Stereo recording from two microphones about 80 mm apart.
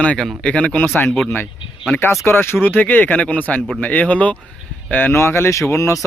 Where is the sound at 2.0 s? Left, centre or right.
Left.